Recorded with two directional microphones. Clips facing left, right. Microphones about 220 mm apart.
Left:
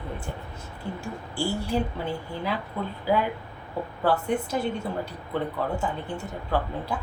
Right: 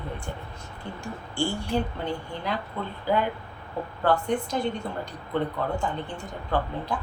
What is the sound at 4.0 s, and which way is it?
A woman's voice, 5° left (ahead or behind).